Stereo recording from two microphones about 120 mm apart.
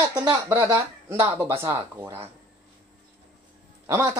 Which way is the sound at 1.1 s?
15° right (ahead or behind).